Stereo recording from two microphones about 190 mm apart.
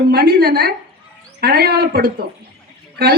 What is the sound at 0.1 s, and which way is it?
A woman's voice, 55° right (ahead or behind).